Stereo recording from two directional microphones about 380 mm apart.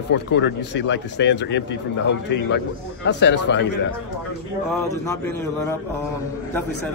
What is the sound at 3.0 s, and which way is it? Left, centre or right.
Speech, left.